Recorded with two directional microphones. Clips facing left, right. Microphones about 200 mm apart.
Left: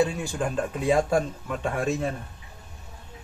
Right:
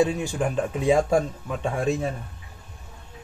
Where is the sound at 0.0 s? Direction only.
15° right (ahead or behind).